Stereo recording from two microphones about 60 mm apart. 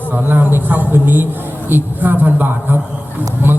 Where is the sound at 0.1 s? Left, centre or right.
Right.